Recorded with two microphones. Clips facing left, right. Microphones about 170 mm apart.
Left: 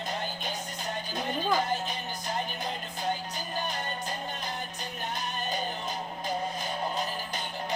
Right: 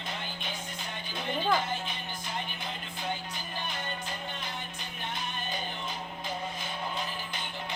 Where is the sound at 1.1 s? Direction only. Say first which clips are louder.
Even; 40° left (ahead or behind).